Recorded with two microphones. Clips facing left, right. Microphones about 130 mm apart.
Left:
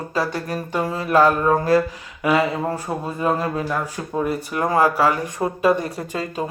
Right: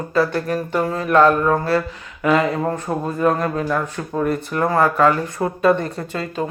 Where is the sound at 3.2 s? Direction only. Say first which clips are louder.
Right 3 dB; 10° left (ahead or behind).